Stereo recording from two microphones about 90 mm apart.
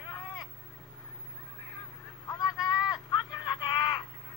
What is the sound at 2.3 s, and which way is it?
Vehicle, 40° left (ahead or behind).